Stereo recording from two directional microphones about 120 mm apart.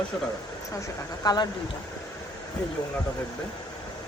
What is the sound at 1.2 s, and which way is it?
Speech, 35° left (ahead or behind).